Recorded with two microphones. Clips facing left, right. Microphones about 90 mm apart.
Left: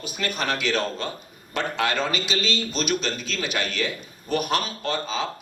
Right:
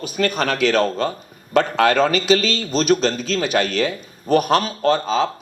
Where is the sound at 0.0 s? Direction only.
45° right (ahead or behind).